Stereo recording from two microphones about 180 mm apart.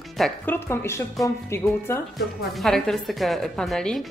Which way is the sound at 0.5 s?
15° left (ahead or behind).